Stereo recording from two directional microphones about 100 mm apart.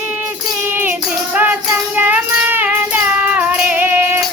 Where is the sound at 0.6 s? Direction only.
20° right (ahead or behind).